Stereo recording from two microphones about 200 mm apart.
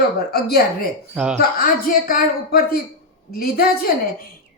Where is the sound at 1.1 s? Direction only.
5° right (ahead or behind).